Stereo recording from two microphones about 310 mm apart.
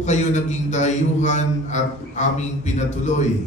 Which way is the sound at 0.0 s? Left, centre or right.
Left.